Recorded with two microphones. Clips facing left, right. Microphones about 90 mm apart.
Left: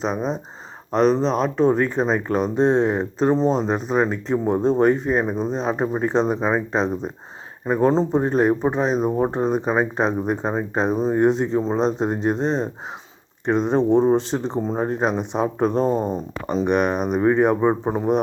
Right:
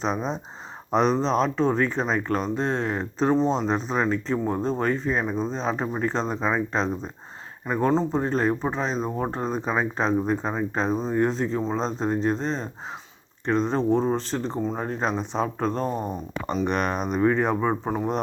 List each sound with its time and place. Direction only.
0.0 s speech: 5° left (ahead or behind); by 16.2 s 25° left (ahead or behind)
16.6 s speech: 10° left (ahead or behind)